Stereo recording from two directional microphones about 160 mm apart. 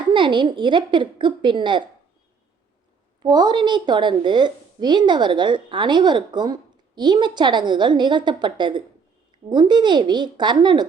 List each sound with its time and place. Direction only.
0.1 s a woman's voice: 30° right (ahead or behind)
3.2 s a woman's voice: 25° right (ahead or behind)